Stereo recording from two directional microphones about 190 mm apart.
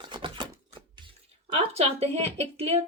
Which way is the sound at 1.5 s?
30° right (ahead or behind).